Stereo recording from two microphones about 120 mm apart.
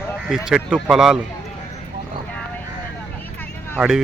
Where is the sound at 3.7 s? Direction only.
5° right (ahead or behind).